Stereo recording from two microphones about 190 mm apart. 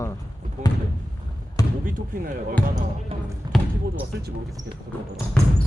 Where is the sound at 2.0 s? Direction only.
45° right (ahead or behind).